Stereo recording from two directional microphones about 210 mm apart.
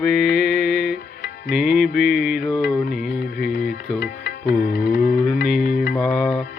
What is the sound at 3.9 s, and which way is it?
Music, 50° left (ahead or behind).